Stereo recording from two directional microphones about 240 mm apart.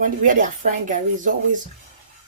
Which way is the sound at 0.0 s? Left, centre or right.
Right.